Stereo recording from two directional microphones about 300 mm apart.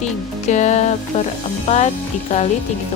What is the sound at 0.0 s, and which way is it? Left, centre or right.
Music, left.